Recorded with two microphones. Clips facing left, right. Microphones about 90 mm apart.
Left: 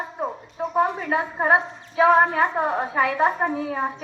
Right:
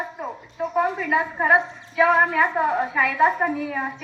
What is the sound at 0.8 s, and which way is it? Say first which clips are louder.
A woman's voice: even; 35° left (ahead or behind).